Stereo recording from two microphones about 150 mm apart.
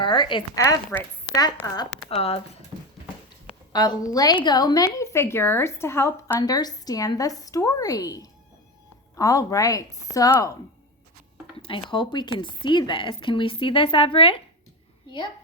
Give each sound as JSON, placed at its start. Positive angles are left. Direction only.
{"t": 0.0, "sound": "speech", "side_deg": 35}
{"t": 1.6, "sound": "a woman's voice", "side_deg": 25}
{"t": 2.0, "sound": "speech", "side_deg": 40}
{"t": 3.7, "sound": "a woman's voice", "side_deg": 25}
{"t": 11.6, "sound": "a woman's voice", "side_deg": 35}